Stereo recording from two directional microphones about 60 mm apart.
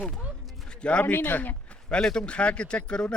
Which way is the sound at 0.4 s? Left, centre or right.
Centre.